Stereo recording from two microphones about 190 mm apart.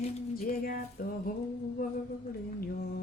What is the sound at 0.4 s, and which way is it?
Speech, 50° left (ahead or behind).